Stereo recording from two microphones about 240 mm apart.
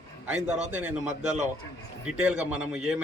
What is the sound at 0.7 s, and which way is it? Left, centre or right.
A man's voice, centre.